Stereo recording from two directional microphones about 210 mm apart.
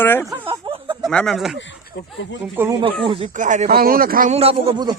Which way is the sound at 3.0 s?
30° right (ahead or behind).